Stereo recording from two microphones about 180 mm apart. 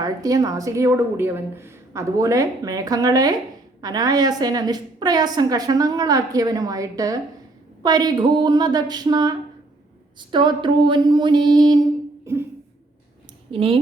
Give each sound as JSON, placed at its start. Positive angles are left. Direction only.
{"t": 0.0, "sound": "a woman's voice", "side_deg": -20}
{"t": 10.3, "sound": "a woman's voice", "side_deg": -25}
{"t": 12.2, "sound": "a sound", "side_deg": -15}
{"t": 13.5, "sound": "speech", "side_deg": -30}